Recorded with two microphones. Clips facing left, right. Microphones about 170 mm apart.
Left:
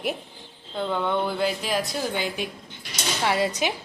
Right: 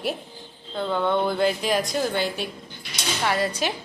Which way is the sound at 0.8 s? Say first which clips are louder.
Right 2 dB; 10° left (ahead or behind).